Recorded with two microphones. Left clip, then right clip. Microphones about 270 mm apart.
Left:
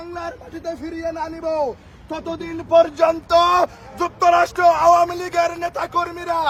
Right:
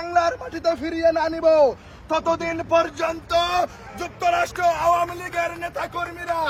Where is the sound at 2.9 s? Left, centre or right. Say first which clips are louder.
Left 8 dB; left.